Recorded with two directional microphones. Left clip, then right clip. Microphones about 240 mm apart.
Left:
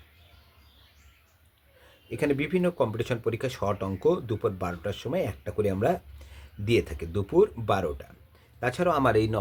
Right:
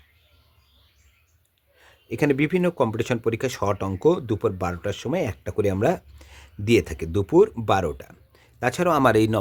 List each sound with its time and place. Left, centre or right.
2.0 s speech: right